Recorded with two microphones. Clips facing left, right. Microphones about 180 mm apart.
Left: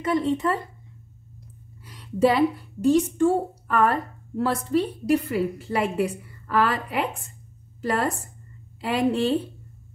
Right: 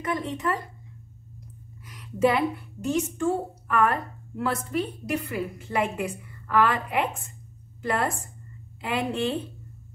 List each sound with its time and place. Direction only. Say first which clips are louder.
0.0 s speech: left 6 dB; 30° left (ahead or behind)
1.9 s a woman's voice: left 2 dB; 30° left (ahead or behind)